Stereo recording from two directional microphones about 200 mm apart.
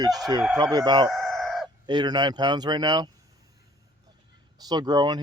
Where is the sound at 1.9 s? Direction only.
20° right (ahead or behind).